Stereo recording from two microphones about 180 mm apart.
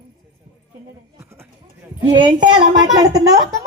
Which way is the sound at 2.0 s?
25° right (ahead or behind).